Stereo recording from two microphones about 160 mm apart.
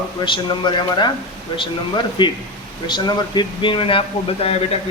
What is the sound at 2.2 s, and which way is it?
A man's voice, 30° left (ahead or behind).